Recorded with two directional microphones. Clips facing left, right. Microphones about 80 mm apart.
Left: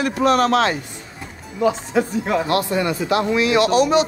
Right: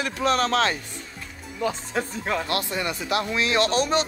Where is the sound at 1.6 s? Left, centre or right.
Left.